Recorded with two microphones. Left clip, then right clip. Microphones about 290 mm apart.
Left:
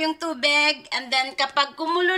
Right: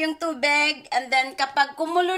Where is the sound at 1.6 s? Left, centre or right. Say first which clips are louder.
Right 2 dB; centre.